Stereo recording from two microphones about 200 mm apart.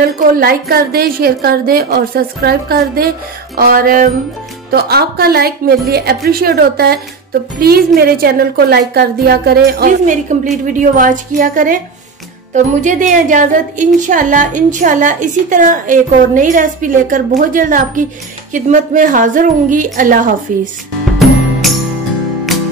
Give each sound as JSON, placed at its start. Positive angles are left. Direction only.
{"t": 0.0, "sound": "a woman's voice", "side_deg": -50}
{"t": 12.8, "sound": "a woman's voice", "side_deg": -40}
{"t": 21.2, "sound": "music", "side_deg": 0}